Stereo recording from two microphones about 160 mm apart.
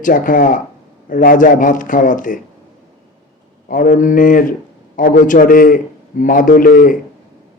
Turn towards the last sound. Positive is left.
turn(degrees=55)  # may be behind; listen again after turning